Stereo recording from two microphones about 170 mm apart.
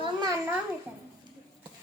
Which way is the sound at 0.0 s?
25° right (ahead or behind).